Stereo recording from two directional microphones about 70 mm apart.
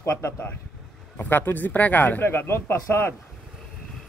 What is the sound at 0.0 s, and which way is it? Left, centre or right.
Speech, left.